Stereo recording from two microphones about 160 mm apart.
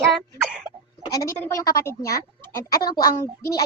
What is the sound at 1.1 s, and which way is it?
Speech, 20° left (ahead or behind).